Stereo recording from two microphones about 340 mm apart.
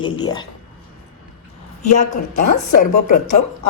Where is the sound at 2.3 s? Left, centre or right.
Left.